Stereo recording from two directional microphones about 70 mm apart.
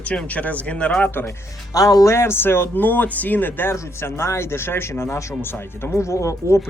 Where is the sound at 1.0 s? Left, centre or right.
Left.